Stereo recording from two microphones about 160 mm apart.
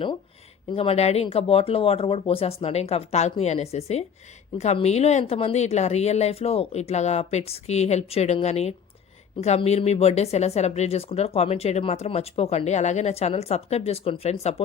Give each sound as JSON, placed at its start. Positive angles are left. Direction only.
{"t": 0.7, "sound": "a woman's voice", "side_deg": 40}